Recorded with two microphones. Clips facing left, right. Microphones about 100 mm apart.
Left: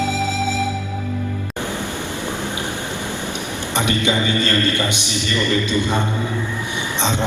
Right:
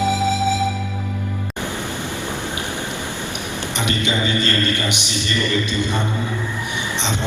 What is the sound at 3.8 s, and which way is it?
Music, 20° left (ahead or behind).